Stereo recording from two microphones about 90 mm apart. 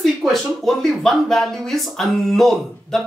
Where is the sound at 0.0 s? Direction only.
Centre (ahead or behind).